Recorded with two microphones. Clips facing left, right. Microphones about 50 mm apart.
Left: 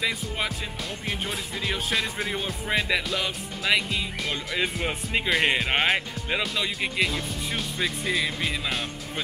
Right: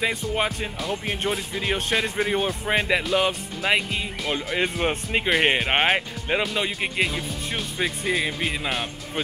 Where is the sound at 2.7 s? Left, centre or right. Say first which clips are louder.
Right 3 dB; right.